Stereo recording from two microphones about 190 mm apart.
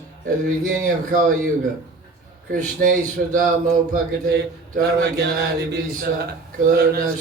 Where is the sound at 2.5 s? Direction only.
45° right (ahead or behind).